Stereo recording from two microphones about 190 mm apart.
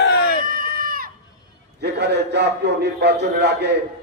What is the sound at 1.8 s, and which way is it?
A man's voice, 60° right (ahead or behind).